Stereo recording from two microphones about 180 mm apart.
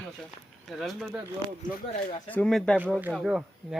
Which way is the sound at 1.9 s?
45° left (ahead or behind).